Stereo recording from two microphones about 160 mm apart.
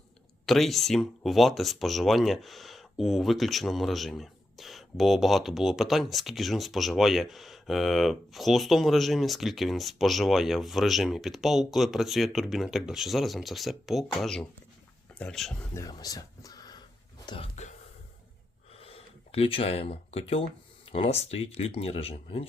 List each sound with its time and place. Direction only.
0.4 s speech: centre (ahead or behind)
15.7 s speech: 20° left (ahead or behind)
17.2 s wail: 35° left (ahead or behind)
18.8 s a sound: 35° left (ahead or behind)
20.9 s speech: 40° left (ahead or behind)